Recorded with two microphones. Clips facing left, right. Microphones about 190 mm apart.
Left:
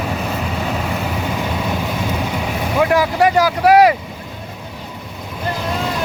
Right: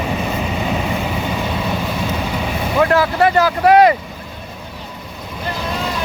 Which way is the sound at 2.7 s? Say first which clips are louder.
Even; 10° left (ahead or behind).